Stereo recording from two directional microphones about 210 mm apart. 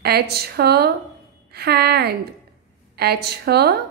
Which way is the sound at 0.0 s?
50° right (ahead or behind).